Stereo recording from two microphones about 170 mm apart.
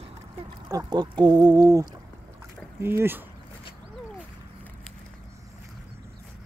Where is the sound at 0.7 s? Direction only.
25° right (ahead or behind).